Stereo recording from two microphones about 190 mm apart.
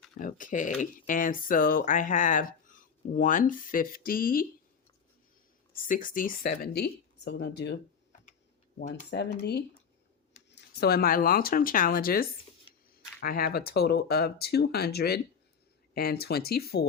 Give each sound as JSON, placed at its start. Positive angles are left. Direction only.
{"t": 0.2, "sound": "speech", "side_deg": 45}
{"t": 5.7, "sound": "speech", "side_deg": 45}
{"t": 9.0, "sound": "speech", "side_deg": 60}